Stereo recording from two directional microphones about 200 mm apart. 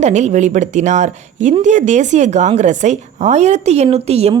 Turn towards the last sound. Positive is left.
turn(degrees=-30)  # may be behind; listen again after turning